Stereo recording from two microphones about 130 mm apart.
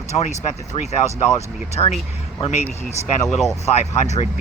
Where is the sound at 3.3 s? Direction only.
Centre (ahead or behind).